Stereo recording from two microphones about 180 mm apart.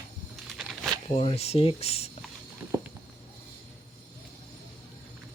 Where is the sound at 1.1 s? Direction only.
35° left (ahead or behind).